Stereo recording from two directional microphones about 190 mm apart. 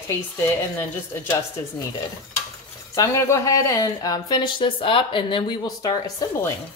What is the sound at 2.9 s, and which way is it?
Speech, 15° left (ahead or behind).